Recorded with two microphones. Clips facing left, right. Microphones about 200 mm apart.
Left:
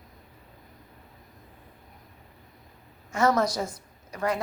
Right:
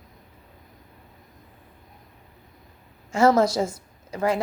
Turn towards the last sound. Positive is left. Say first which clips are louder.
# right 4 dB
turn(degrees=-25)  # may be behind; listen again after turning